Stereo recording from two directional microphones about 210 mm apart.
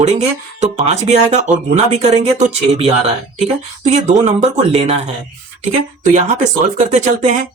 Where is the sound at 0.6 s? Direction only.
30° right (ahead or behind).